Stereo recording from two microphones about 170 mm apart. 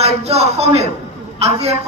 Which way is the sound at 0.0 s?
35° right (ahead or behind).